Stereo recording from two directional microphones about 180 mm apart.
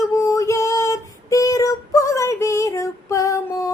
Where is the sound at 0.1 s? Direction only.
15° left (ahead or behind).